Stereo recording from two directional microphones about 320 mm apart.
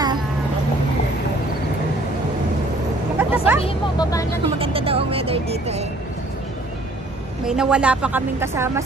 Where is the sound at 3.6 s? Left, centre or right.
Centre.